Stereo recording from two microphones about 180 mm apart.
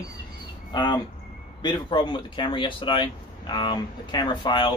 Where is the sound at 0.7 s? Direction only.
25° left (ahead or behind).